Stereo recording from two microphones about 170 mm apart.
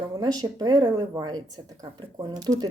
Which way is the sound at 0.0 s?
25° right (ahead or behind).